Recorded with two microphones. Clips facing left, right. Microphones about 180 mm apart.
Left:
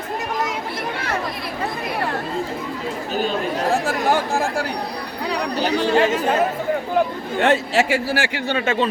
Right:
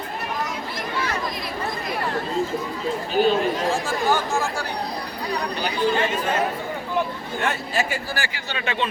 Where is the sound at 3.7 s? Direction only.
65° left (ahead or behind).